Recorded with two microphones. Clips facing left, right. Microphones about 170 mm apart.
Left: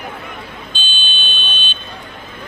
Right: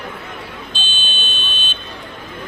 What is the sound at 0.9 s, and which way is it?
Buzzer, 40° right (ahead or behind).